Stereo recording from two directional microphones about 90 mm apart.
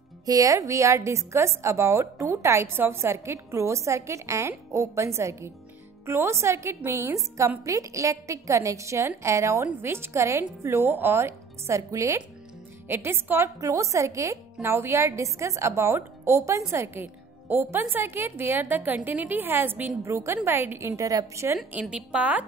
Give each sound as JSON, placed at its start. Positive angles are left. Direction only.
{"t": 0.2, "sound": "a woman's voice", "side_deg": -40}
{"t": 13.6, "sound": "a woman's voice", "side_deg": -35}
{"t": 20.9, "sound": "a woman's voice", "side_deg": -40}
{"t": 21.7, "sound": "a woman's voice", "side_deg": -10}